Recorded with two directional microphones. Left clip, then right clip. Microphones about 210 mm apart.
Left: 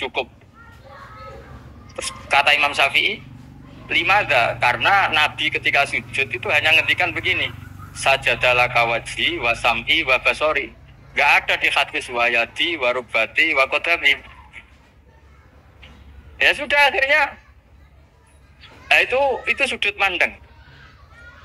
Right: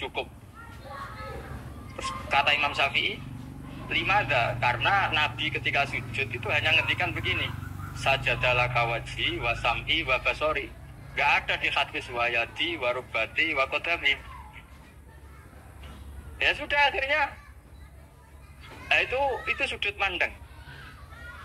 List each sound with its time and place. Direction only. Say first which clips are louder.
0.0 s a man's voice: left 8 dB; 40° left (ahead or behind)
2.0 s a man's voice: left 7 dB; 40° left (ahead or behind)
16.3 s a man's voice: left 8 dB; 40° left (ahead or behind)
18.6 s a man's voice: left 8 dB; 40° left (ahead or behind)